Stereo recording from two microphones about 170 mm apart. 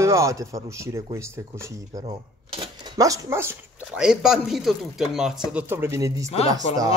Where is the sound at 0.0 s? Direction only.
15° right (ahead or behind).